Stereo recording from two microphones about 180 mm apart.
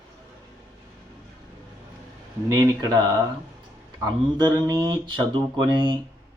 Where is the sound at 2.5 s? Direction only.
20° right (ahead or behind).